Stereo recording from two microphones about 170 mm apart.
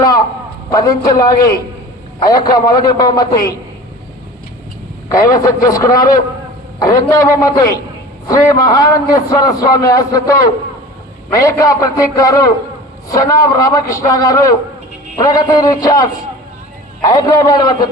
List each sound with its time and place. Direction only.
0.7 s a man's voice: 20° left (ahead or behind)
5.0 s a man's voice: 20° left (ahead or behind)